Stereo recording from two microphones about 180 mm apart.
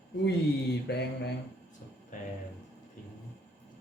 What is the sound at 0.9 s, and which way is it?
Mantra, 65° left (ahead or behind).